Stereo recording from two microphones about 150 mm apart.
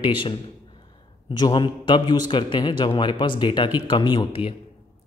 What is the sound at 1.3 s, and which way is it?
Speech, 30° left (ahead or behind).